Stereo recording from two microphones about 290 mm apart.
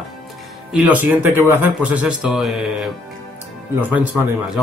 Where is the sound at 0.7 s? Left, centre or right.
Centre.